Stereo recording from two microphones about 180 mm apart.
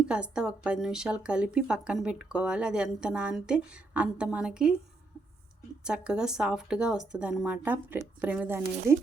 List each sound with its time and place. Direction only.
0.1 s a woman's voice: 5° right (ahead or behind)
5.8 s a woman's voice: 5° right (ahead or behind)